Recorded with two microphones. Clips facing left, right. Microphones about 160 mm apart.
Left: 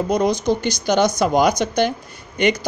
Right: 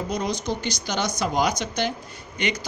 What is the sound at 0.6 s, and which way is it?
A man's voice, 55° left (ahead or behind).